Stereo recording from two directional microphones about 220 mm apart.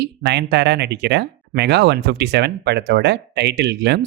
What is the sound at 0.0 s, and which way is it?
Speech, 50° right (ahead or behind).